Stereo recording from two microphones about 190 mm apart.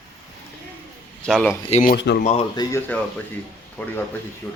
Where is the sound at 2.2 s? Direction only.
35° left (ahead or behind).